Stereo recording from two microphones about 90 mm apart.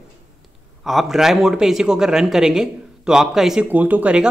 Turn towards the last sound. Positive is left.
turn(degrees=-15)  # may be behind; listen again after turning